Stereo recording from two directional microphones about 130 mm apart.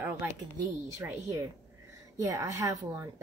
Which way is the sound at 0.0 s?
15° right (ahead or behind).